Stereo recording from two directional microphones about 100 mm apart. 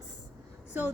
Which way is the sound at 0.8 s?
20° right (ahead or behind).